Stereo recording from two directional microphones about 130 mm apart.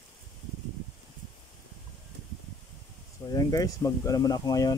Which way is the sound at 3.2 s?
30° left (ahead or behind).